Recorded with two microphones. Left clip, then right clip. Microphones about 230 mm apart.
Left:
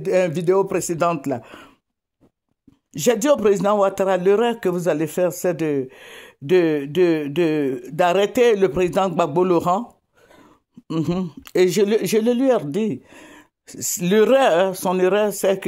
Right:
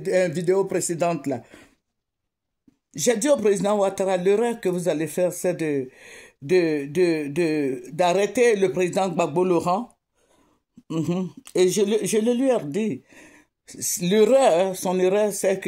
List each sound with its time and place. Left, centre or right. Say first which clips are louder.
0.0 s speech: left 3 dB; left
3.0 s speech: left 3 dB; left
10.9 s speech: left 3 dB; left